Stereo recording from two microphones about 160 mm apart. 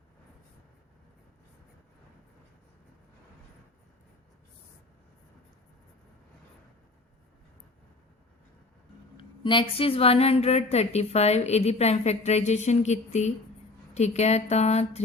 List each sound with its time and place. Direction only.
9.1 s a woman's voice: 30° left (ahead or behind)